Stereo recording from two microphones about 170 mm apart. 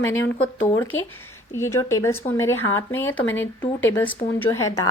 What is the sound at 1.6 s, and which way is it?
Speech, 15° left (ahead or behind).